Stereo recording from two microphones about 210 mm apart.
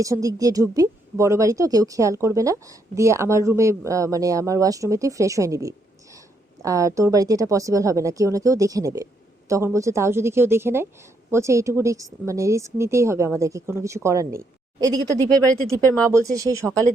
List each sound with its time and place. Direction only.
0.0 s speech: 15° right (ahead or behind)
16.0 s speech: 15° right (ahead or behind)